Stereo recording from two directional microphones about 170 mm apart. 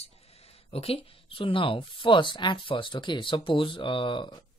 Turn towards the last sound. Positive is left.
turn(degrees=30)  # may be behind; listen again after turning